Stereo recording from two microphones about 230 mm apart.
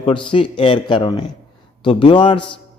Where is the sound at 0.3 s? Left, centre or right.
Left.